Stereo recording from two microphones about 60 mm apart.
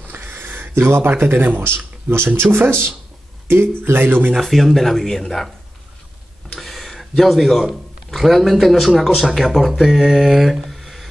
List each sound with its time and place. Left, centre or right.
0.1 s speech: right
4.3 s speech: centre
6.5 s speech: centre